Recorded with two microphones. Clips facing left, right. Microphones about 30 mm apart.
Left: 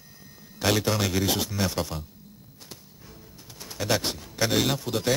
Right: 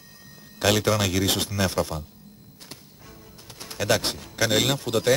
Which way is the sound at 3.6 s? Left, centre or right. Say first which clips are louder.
Right 3 dB; right.